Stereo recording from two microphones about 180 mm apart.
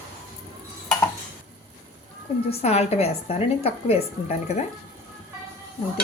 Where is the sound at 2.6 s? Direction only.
35° left (ahead or behind).